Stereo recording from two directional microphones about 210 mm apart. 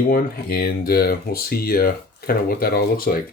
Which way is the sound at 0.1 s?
45° left (ahead or behind).